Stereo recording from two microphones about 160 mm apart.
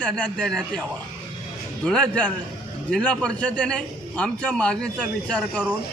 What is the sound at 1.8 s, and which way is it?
A man's voice, 5° left (ahead or behind).